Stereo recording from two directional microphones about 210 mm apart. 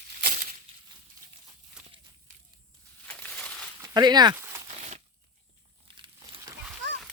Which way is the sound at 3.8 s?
20° right (ahead or behind).